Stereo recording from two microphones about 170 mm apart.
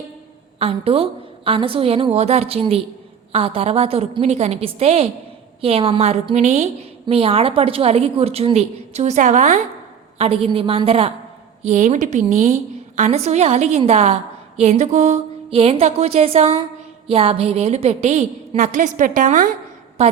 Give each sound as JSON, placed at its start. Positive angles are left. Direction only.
{"t": 0.6, "sound": "a woman's voice", "side_deg": -35}
{"t": 10.2, "sound": "a woman's voice", "side_deg": -35}